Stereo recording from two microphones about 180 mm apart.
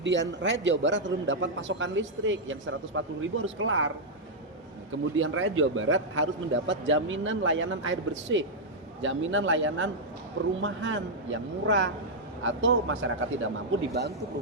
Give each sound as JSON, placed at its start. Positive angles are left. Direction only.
{"t": 0.0, "sound": "a man's voice", "side_deg": -85}